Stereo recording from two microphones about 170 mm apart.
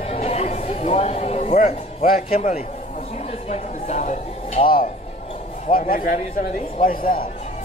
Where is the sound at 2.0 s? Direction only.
55° left (ahead or behind).